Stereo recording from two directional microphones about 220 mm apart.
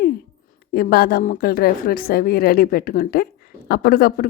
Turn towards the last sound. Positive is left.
turn(degrees=40)  # may be behind; listen again after turning